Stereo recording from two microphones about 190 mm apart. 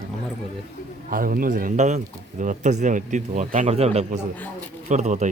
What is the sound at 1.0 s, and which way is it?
A man's voice, 50° right (ahead or behind).